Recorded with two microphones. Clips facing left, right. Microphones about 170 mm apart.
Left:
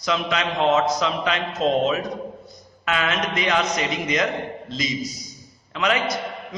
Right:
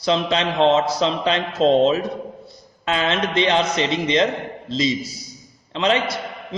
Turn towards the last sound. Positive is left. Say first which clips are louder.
# right 3 dB
turn(degrees=-30)  # may be behind; listen again after turning